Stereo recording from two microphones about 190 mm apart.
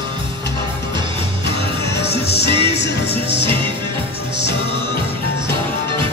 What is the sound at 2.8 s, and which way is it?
Music, 60° left (ahead or behind).